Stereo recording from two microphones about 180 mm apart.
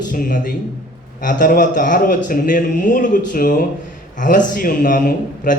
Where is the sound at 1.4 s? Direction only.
45° left (ahead or behind).